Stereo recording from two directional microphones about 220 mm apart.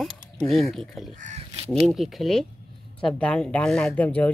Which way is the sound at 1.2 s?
30° right (ahead or behind).